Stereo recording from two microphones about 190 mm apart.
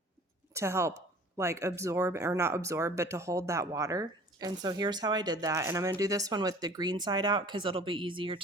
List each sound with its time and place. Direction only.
0.5 s speech: 15° right (ahead or behind)